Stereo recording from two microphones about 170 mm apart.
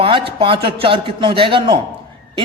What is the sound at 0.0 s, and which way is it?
A man's voice, 30° right (ahead or behind).